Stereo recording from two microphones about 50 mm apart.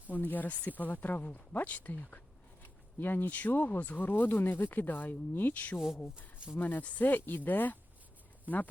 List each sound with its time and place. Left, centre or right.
0.1 s speech: left
5.7 s speech: centre
6.6 s speech: left
8.5 s speech: right